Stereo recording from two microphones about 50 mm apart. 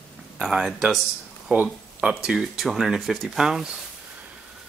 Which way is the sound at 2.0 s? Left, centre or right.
Centre.